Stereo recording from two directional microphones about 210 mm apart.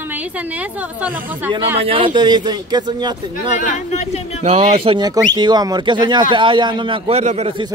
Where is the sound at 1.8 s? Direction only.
25° right (ahead or behind).